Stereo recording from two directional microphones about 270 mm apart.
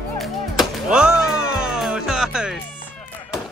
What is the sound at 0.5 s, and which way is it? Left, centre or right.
Music, centre.